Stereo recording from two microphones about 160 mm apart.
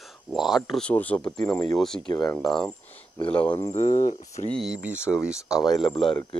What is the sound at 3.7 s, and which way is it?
Speech, 50° left (ahead or behind).